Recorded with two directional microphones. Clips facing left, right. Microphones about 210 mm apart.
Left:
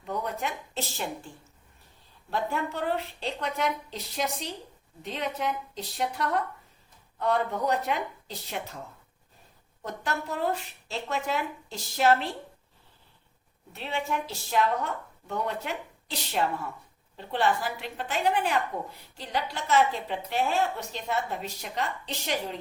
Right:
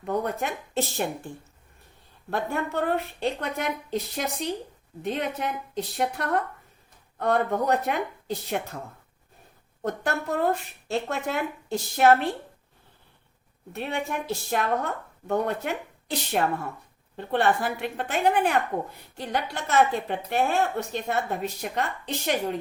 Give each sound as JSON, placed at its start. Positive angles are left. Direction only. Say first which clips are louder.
{"t": 0.0, "sound": "a woman's voice", "louder": "right 5 dB", "side_deg": -50}
{"t": 2.3, "sound": "a woman's voice", "louder": "right 3 dB", "side_deg": -55}
{"t": 9.8, "sound": "a woman's voice", "louder": "right 5 dB", "side_deg": -55}
{"t": 13.7, "sound": "a woman's voice", "louder": "right 2 dB", "side_deg": -55}